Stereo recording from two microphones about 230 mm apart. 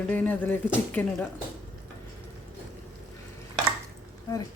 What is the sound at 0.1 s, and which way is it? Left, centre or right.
Speech, centre.